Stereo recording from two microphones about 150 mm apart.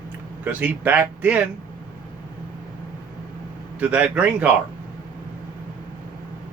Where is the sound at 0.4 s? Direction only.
10° right (ahead or behind).